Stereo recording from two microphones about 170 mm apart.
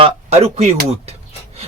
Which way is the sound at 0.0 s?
35° right (ahead or behind).